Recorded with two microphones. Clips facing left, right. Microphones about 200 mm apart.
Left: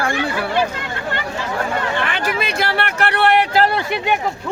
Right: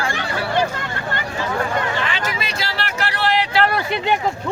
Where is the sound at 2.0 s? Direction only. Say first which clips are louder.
Left 3 dB; 55° left (ahead or behind).